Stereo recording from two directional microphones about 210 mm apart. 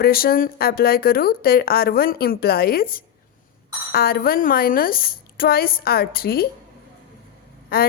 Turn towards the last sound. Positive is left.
turn(degrees=45)  # may be behind; listen again after turning